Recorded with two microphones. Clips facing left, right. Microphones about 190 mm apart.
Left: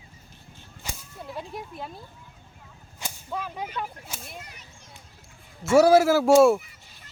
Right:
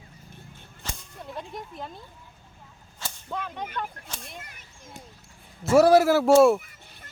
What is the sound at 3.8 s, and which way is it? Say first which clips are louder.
Speech: even; 5° left (ahead or behind).